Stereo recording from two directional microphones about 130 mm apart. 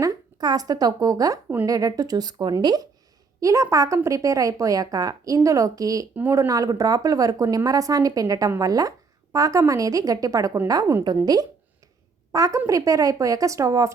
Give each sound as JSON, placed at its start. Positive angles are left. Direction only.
{"t": 0.0, "sound": "a woman's voice", "side_deg": -30}
{"t": 6.1, "sound": "speech", "side_deg": -15}
{"t": 6.5, "sound": "a woman's voice", "side_deg": -25}
{"t": 12.3, "sound": "a woman's voice", "side_deg": -25}